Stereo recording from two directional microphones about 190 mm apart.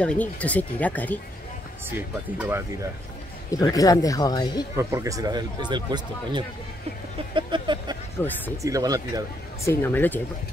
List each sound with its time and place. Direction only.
0.0 s speech: 5° left (ahead or behind)
1.9 s speech: 10° right (ahead or behind)
3.4 s speech: 20° left (ahead or behind)
4.7 s speech: 15° right (ahead or behind)
7.3 s a sound: 25° right (ahead or behind)
8.6 s speech: 20° right (ahead or behind)
9.7 s speech: 10° left (ahead or behind)